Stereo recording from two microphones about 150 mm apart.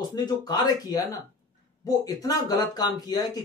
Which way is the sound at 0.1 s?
25° left (ahead or behind).